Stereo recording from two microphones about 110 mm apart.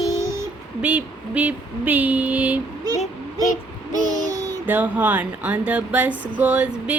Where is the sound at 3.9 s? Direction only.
35° right (ahead or behind).